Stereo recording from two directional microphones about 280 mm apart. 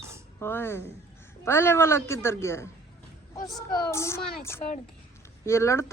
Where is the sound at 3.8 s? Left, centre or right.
Centre.